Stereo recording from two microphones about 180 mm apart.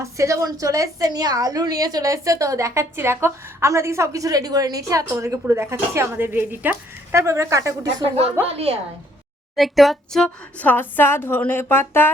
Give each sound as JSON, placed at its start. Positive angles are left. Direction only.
{"t": 0.0, "sound": "a woman's voice", "side_deg": -15}
{"t": 8.0, "sound": "a woman's voice", "side_deg": -35}
{"t": 9.6, "sound": "a woman's voice", "side_deg": 0}